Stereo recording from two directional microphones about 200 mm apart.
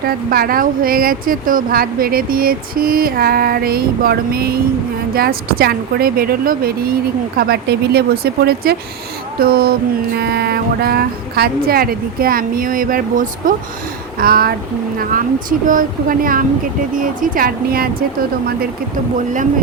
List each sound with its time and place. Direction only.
0.0 s speech: 50° right (ahead or behind)